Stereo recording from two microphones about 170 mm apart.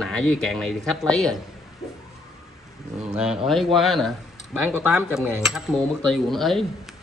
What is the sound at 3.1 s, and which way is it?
Speech, 5° right (ahead or behind).